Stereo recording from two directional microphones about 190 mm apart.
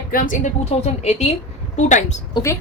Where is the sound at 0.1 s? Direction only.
45° left (ahead or behind).